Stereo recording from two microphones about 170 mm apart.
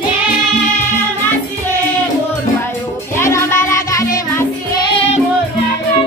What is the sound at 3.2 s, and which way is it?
Music, 15° left (ahead or behind).